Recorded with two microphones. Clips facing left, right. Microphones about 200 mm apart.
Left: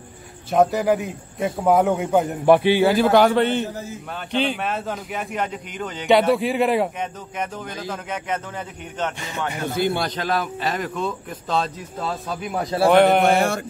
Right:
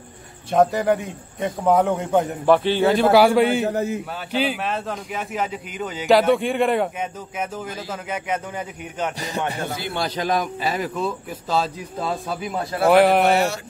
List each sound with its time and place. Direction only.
0.5 s a man's voice: centre (ahead or behind)
2.4 s a man's voice: 15° left (ahead or behind); by 3.6 s 10° right (ahead or behind)
3.6 s a man's voice: 65° right (ahead or behind)
4.3 s a man's voice: 5° right (ahead or behind)
13.4 s mantra: 55° left (ahead or behind)